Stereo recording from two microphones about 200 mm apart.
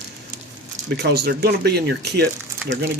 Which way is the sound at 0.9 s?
55° right (ahead or behind).